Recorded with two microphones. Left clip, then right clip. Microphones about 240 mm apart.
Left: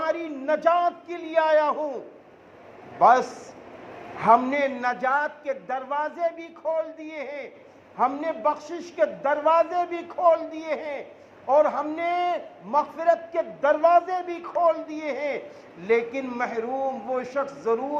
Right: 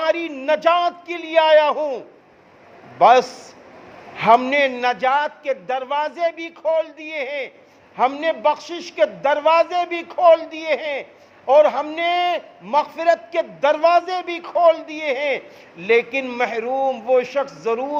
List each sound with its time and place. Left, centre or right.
0.0 s a man's voice: right
3.0 s a man's voice: right